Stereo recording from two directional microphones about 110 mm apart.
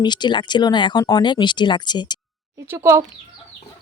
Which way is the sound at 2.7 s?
25° right (ahead or behind).